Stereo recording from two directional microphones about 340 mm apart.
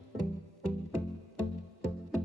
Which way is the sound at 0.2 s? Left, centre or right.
Left.